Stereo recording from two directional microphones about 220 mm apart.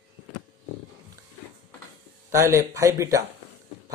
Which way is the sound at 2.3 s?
15° right (ahead or behind).